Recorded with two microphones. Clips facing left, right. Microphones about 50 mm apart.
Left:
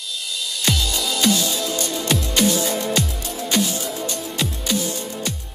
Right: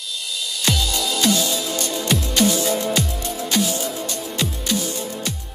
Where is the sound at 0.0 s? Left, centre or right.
Centre.